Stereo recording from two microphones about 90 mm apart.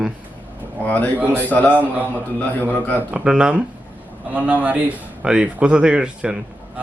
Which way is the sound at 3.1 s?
10° right (ahead or behind).